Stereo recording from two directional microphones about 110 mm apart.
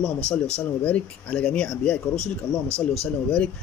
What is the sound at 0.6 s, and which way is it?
Speech, 10° left (ahead or behind).